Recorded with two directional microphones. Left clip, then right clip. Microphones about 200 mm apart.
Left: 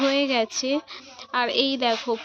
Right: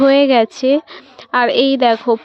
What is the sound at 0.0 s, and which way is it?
A woman's voice, 45° right (ahead or behind).